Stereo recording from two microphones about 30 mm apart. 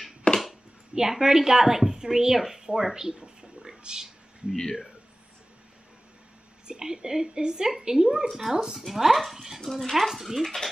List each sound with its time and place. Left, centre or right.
0.3 s a sound: left
0.9 s a woman's voice: centre
6.7 s a woman's voice: right; by 10.7 s centre